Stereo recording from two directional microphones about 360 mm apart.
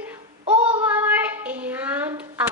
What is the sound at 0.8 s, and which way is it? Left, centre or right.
A child's voice, centre.